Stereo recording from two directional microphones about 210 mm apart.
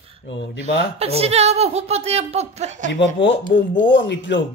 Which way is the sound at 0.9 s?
30° right (ahead or behind).